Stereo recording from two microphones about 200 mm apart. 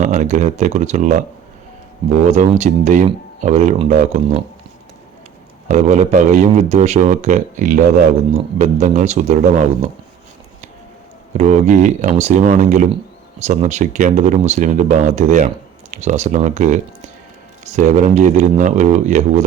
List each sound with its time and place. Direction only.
0.0 s speech: 35° right (ahead or behind)
2.2 s speech: 35° right (ahead or behind)
5.6 s speech: 35° right (ahead or behind)
11.3 s speech: 35° right (ahead or behind)